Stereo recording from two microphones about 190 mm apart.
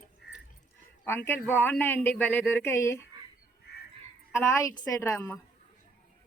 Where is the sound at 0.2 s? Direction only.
55° left (ahead or behind).